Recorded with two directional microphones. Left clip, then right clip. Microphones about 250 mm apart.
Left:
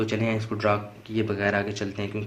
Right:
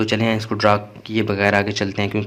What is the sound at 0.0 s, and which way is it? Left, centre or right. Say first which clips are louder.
Speech: right 7 dB; right.